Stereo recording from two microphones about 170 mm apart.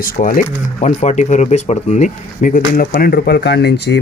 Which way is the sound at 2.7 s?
60° left (ahead or behind).